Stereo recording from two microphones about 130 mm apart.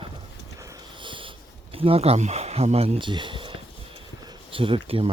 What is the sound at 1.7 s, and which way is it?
Speech, 45° right (ahead or behind).